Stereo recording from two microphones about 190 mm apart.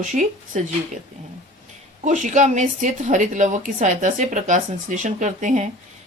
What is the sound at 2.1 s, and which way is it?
Speech, 40° right (ahead or behind).